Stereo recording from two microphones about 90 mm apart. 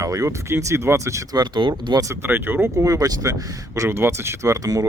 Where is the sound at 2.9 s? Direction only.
40° right (ahead or behind).